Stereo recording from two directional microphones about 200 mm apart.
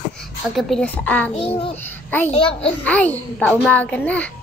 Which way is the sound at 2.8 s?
10° left (ahead or behind).